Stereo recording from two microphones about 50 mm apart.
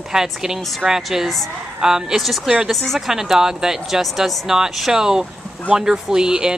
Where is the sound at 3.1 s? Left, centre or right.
Centre.